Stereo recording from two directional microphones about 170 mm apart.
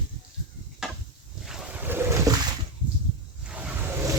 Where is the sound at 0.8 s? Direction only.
Centre (ahead or behind).